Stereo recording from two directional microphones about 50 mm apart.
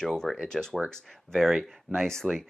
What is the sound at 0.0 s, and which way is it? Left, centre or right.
Speech, centre.